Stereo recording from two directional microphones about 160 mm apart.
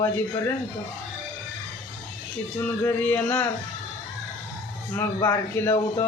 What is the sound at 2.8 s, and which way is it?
Speech, 15° left (ahead or behind).